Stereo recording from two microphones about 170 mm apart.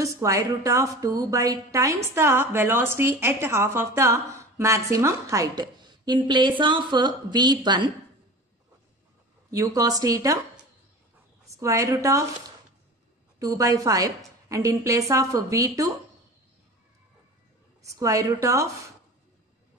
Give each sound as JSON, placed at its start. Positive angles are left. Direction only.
{"t": 0.0, "sound": "a woman's voice", "side_deg": -20}
{"t": 9.5, "sound": "a woman's voice", "side_deg": -20}
{"t": 11.4, "sound": "a woman's voice", "side_deg": -20}
{"t": 13.4, "sound": "a woman's voice", "side_deg": -20}
{"t": 17.8, "sound": "a woman's voice", "side_deg": -20}